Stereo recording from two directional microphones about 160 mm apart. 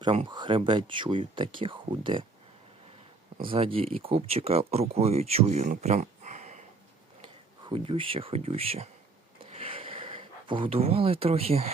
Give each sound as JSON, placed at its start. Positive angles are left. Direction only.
{"t": 0.0, "sound": "speech", "side_deg": -30}
{"t": 3.4, "sound": "speech", "side_deg": -35}
{"t": 7.2, "sound": "speech", "side_deg": -35}
{"t": 9.4, "sound": "a sound", "side_deg": -35}